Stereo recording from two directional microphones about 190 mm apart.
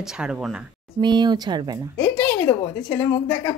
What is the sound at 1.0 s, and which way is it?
Speech, 20° right (ahead or behind).